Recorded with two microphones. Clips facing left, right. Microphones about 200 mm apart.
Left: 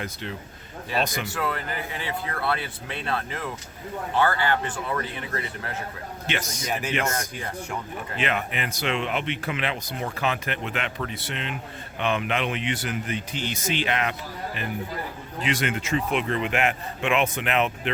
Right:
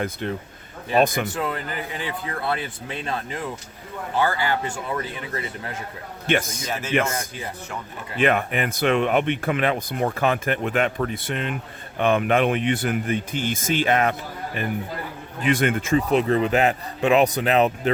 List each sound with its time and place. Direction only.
0.0 s speech: 50° right (ahead or behind)
1.3 s speech: 20° right (ahead or behind)
6.3 s speech: 55° right (ahead or behind)
8.2 s speech: 50° right (ahead or behind)
16.0 s speech: 40° right (ahead or behind)